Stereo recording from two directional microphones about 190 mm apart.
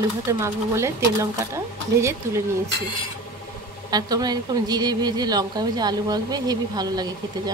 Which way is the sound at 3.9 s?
20° right (ahead or behind).